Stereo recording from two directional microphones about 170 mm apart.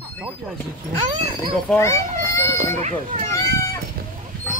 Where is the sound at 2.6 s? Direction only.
40° right (ahead or behind).